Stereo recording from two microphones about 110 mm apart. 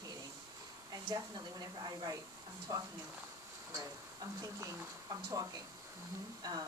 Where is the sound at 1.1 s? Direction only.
40° right (ahead or behind).